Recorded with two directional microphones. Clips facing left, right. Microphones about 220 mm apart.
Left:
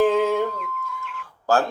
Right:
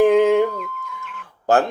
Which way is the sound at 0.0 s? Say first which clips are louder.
Right 5 dB; 15° right (ahead or behind).